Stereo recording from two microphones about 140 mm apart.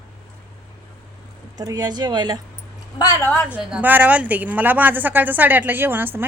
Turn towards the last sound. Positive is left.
turn(degrees=-15)  # may be behind; listen again after turning